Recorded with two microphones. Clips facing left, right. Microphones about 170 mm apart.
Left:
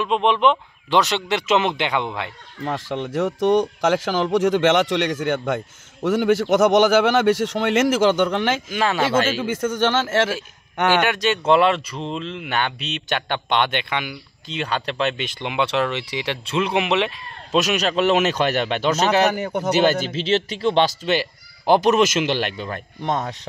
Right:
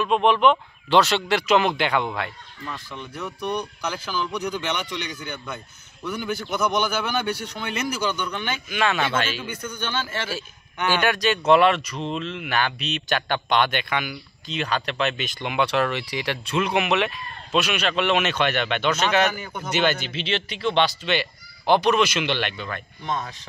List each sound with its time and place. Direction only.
0.0 s speech: 20° left (ahead or behind)
2.6 s a man's voice: 90° left
8.7 s speech: 30° left (ahead or behind)
9.4 s a man's voice: 90° left
11.0 s speech: 25° left (ahead or behind)
17.6 s speech: 40° left (ahead or behind)
19.3 s a man's voice: 75° left (ahead or behind)
19.7 s speech: 35° left (ahead or behind)
23.0 s speech: 65° left (ahead or behind)